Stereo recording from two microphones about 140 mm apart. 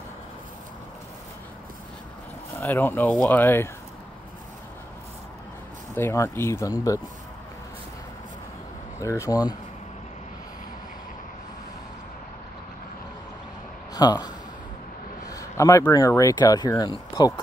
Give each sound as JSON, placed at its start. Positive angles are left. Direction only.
{"t": 2.6, "sound": "speech", "side_deg": 15}
{"t": 5.9, "sound": "speech", "side_deg": 20}
{"t": 9.0, "sound": "speech", "side_deg": 20}
{"t": 13.9, "sound": "speech", "side_deg": 30}